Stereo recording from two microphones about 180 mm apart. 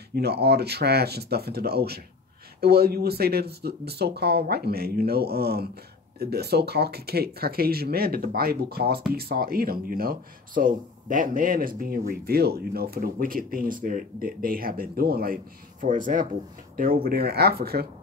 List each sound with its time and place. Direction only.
0.1 s speech: 65° right (ahead or behind)